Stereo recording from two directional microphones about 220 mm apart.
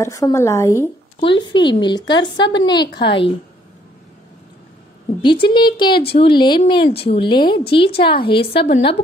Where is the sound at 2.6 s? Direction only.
20° left (ahead or behind).